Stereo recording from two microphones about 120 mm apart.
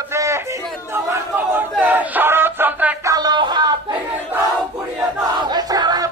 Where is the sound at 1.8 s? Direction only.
15° right (ahead or behind).